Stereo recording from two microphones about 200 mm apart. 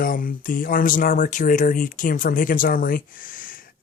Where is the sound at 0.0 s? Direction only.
45° left (ahead or behind).